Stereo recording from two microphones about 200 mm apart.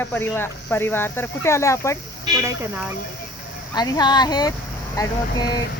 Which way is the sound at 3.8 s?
20° left (ahead or behind).